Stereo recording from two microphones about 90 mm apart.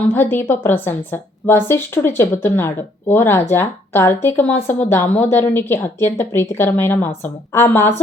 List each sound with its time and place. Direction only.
0.1 s a woman's voice: 25° left (ahead or behind)